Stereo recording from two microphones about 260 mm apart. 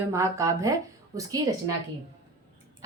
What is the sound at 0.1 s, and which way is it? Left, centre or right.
Speech, centre.